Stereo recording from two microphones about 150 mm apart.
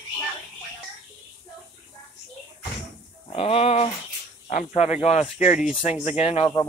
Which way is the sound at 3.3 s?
40° left (ahead or behind).